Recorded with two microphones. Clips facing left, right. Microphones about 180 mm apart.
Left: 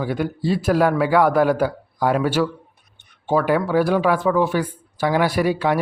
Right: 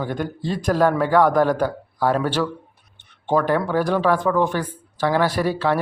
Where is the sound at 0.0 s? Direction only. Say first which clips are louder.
Left 3 dB; 10° left (ahead or behind).